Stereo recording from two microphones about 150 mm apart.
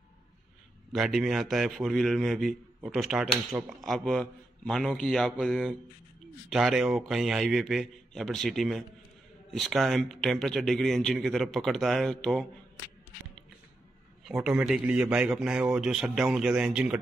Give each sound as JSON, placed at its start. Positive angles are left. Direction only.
{"t": 0.9, "sound": "a man's voice", "side_deg": 0}
{"t": 14.2, "sound": "a man's voice", "side_deg": -5}